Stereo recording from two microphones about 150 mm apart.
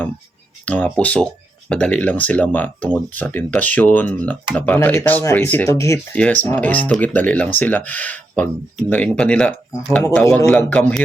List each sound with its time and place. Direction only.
0.6 s speech: 10° left (ahead or behind)
6.1 s speech: 10° left (ahead or behind)